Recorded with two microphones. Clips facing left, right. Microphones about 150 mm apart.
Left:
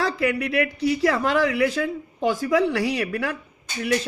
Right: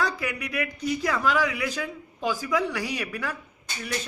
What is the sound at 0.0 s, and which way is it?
A man's voice, 60° left (ahead or behind).